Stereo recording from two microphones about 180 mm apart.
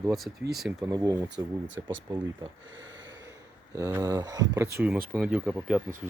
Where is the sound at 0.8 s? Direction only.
20° right (ahead or behind).